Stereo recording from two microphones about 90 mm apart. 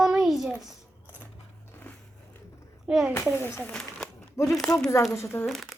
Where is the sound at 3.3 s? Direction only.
25° left (ahead or behind).